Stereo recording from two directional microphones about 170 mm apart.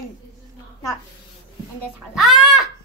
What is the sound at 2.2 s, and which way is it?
Speech, centre (ahead or behind).